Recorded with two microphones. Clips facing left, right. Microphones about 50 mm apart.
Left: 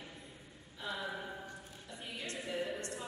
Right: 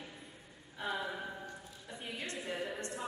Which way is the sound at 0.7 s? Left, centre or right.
Right.